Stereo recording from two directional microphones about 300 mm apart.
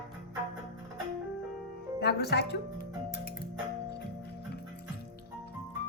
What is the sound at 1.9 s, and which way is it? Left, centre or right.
Speech, left.